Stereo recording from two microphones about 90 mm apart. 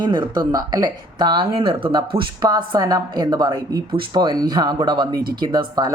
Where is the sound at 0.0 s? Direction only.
55° right (ahead or behind).